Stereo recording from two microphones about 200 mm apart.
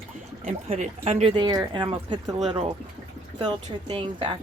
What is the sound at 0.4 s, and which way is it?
Speech, 30° right (ahead or behind).